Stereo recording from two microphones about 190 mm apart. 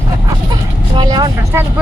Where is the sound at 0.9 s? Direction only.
20° right (ahead or behind).